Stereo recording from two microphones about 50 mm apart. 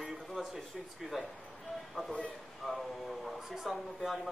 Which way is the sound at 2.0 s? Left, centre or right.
Centre.